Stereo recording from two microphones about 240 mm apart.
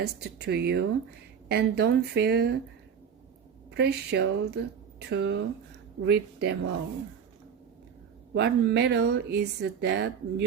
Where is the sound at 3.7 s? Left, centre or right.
Right.